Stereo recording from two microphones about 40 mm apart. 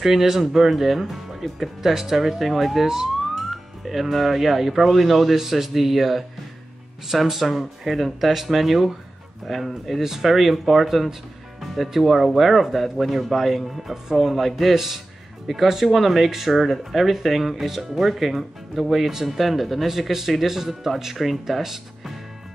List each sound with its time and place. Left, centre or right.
0.0 s speech: centre